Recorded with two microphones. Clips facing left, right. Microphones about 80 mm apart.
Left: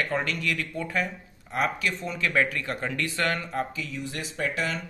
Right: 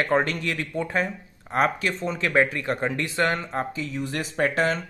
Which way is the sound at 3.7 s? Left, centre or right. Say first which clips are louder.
Right 5 dB; right.